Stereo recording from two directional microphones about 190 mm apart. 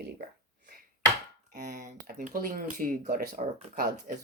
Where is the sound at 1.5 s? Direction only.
45° right (ahead or behind).